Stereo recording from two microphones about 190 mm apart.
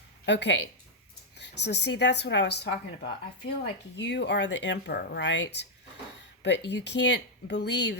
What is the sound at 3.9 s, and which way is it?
Speech, 65° left (ahead or behind).